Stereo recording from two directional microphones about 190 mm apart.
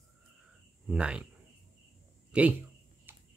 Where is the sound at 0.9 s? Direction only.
5° right (ahead or behind).